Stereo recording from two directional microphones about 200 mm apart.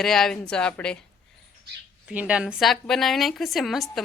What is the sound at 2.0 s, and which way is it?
Speech, 5° right (ahead or behind).